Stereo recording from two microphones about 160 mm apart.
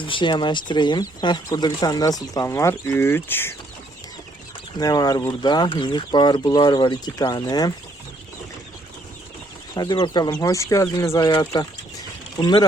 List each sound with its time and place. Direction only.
0.0 s speech: 30° left (ahead or behind); by 3.5 s 15° left (ahead or behind)
4.8 s speech: 25° left (ahead or behind)
9.7 s speech: 25° left (ahead or behind)
11.3 s speech: 30° left (ahead or behind)